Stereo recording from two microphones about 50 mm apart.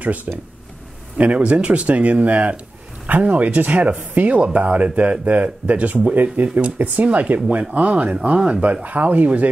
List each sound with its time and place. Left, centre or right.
0.0 s speech: right